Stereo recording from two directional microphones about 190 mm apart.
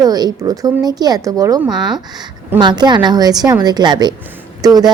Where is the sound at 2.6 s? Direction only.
25° right (ahead or behind).